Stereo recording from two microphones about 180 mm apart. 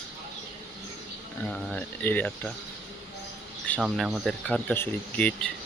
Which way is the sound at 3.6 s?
5° left (ahead or behind).